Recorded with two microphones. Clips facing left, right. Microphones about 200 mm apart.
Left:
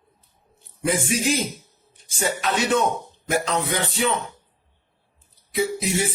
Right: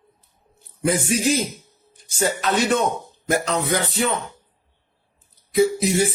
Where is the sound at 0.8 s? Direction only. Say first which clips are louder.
Right 2 dB; 45° right (ahead or behind).